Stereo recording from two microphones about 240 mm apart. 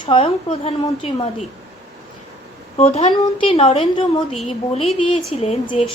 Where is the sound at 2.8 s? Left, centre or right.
Left.